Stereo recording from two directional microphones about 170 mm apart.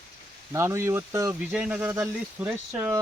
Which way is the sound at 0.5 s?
15° right (ahead or behind).